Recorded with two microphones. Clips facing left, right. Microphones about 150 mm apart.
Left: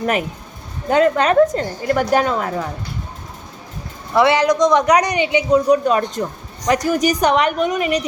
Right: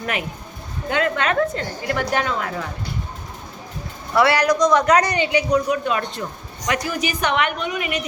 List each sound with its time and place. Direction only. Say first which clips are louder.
0.0 s a woman's voice: left 7 dB; 40° left (ahead or behind)
4.1 s speech: left 3 dB; 20° left (ahead or behind)
5.6 s a woman's voice: left 7 dB; 40° left (ahead or behind)